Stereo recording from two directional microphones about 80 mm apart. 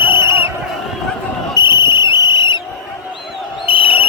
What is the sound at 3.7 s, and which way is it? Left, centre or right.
Cricket, left.